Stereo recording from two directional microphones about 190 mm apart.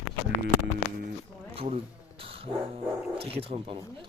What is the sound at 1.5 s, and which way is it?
Bee, 30° right (ahead or behind).